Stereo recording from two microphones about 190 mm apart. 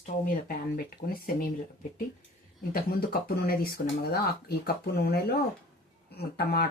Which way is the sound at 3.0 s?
50° left (ahead or behind).